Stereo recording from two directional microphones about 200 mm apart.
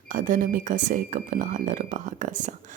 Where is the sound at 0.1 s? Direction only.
40° right (ahead or behind).